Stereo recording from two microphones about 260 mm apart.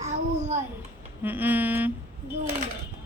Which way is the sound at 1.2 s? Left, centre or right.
Centre.